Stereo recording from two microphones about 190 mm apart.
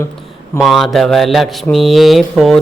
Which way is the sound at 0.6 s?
Centre (ahead or behind).